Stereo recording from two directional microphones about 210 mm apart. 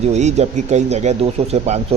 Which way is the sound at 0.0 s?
30° right (ahead or behind).